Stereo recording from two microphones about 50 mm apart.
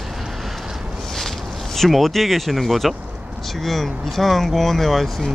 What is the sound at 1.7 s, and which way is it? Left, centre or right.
Speech, centre.